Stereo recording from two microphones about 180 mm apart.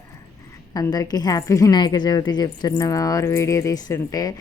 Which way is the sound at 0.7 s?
20° left (ahead or behind).